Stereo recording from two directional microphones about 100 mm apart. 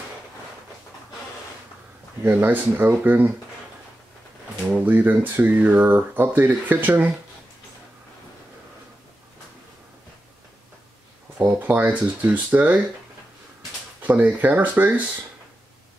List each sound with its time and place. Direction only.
2.2 s speech: 20° right (ahead or behind)
4.6 s speech: 20° right (ahead or behind)
11.3 s speech: 20° right (ahead or behind)
14.0 s speech: 15° right (ahead or behind)